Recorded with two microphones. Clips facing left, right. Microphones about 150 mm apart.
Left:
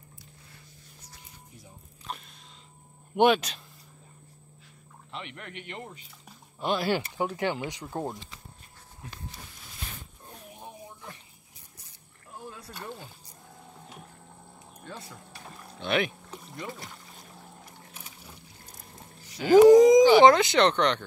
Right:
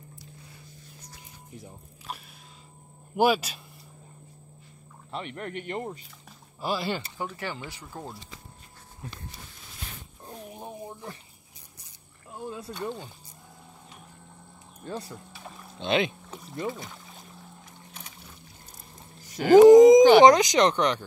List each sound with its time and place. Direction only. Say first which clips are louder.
2.1 s a sound: even; 5° right (ahead or behind)
3.2 s speech: left 1 dB; 5° right (ahead or behind)
5.1 s speech: right 6 dB; 40° right (ahead or behind)
6.6 s speech: left 2 dB; centre (ahead or behind)
7.2 s speech: left 6 dB; 15° left (ahead or behind)
12.4 s rowboat: right 8 dB; 25° right (ahead or behind)
14.9 s speech: right 7 dB; 35° right (ahead or behind)
15.8 s speech: right 2 dB; 20° right (ahead or behind)
16.6 s speech: right 8 dB; centre (ahead or behind)
17.9 s boat: right 4 dB; 10° left (ahead or behind)
19.2 s a sound: right 3 dB; 50° right (ahead or behind)
19.7 s speech: right 3 dB; 20° right (ahead or behind)